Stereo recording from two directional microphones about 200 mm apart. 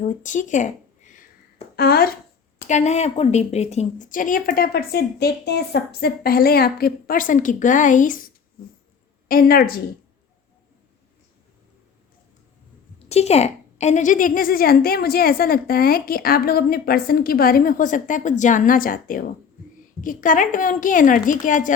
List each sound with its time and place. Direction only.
0.0 s a sound: 40° left (ahead or behind)
2.6 s a woman's voice: 35° left (ahead or behind)
9.3 s a woman's voice: 45° left (ahead or behind)
13.1 s a woman's voice: 30° left (ahead or behind)